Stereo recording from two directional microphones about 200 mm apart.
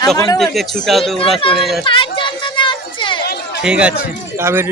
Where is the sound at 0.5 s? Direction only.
Centre (ahead or behind).